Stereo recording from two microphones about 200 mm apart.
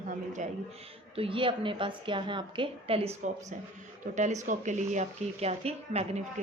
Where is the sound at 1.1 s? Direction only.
25° right (ahead or behind).